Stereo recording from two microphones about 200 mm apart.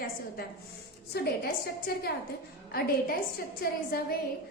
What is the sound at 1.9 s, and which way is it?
A woman's voice, 50° left (ahead or behind).